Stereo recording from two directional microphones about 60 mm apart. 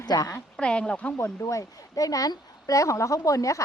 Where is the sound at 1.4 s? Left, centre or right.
Left.